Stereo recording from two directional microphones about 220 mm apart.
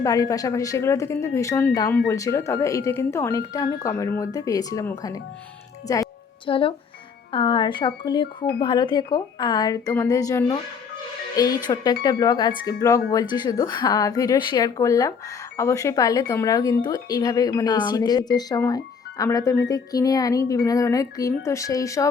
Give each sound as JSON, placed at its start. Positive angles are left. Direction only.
{"t": 0.0, "sound": "speech", "side_deg": 15}
{"t": 5.9, "sound": "music", "side_deg": 20}
{"t": 7.3, "sound": "speech", "side_deg": 25}